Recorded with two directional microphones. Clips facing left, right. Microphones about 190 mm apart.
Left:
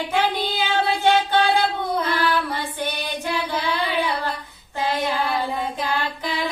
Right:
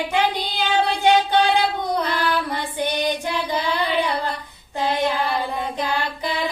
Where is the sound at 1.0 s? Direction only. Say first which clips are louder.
Right 2 dB; 15° right (ahead or behind).